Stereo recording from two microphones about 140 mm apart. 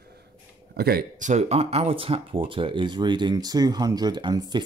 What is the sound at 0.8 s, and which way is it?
Speech, 75° right (ahead or behind).